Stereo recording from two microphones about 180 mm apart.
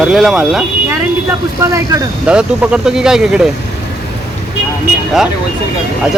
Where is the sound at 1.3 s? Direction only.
15° right (ahead or behind).